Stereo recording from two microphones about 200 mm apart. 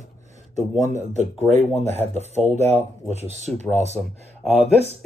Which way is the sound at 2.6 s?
35° right (ahead or behind).